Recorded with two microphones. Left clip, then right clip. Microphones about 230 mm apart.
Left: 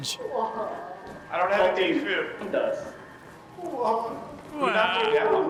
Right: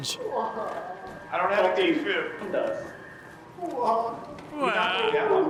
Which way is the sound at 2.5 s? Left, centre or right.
Left.